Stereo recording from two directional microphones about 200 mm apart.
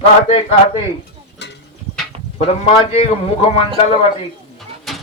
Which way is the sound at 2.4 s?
30° left (ahead or behind).